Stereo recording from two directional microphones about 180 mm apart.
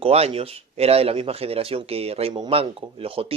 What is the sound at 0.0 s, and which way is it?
Speech, 35° right (ahead or behind).